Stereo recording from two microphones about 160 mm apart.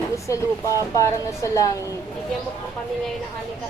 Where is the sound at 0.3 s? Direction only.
20° left (ahead or behind).